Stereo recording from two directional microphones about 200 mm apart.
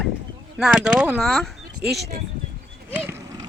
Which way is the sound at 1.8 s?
55° right (ahead or behind).